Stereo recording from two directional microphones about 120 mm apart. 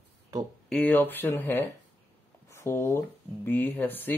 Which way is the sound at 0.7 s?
10° left (ahead or behind).